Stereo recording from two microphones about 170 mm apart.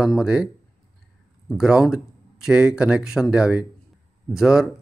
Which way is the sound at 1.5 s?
5° right (ahead or behind).